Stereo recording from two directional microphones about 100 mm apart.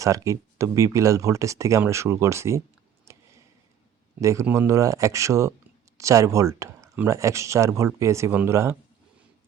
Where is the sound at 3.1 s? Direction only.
30° right (ahead or behind).